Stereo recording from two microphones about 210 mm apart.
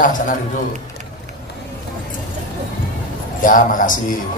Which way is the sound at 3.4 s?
40° left (ahead or behind).